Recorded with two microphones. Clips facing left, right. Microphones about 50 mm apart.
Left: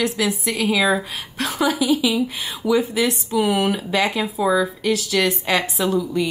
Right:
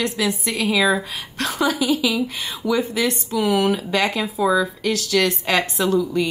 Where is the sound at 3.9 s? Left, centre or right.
Centre.